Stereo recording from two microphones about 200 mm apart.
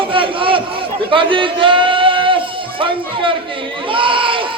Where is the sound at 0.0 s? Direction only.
25° right (ahead or behind).